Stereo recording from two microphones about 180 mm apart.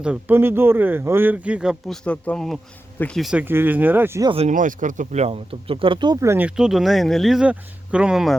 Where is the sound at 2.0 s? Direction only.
5° left (ahead or behind); by 4.3 s 15° right (ahead or behind).